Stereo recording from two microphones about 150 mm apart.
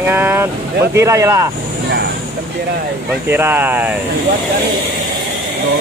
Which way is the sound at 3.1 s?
15° right (ahead or behind).